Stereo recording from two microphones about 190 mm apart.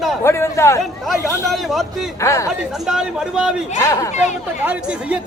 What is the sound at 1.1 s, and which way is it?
Speech, centre (ahead or behind).